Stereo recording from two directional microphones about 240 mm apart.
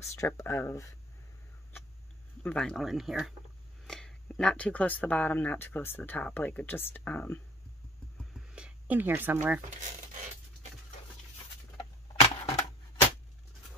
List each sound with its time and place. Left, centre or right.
0.0 s speech: centre
2.4 s speech: centre
8.5 s speech: centre
11.7 s a sound: left